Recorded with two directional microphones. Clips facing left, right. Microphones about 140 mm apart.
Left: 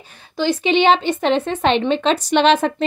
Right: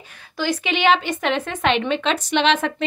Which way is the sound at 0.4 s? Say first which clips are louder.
Left 5 dB; 30° left (ahead or behind).